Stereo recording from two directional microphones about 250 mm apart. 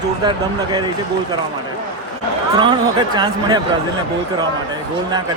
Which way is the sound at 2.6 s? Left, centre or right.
Centre.